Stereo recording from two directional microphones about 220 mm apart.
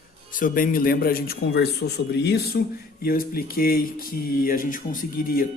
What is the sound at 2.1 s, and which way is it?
Speech, 45° left (ahead or behind).